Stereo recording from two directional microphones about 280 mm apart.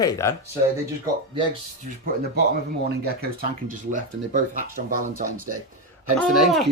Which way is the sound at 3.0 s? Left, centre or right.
Right.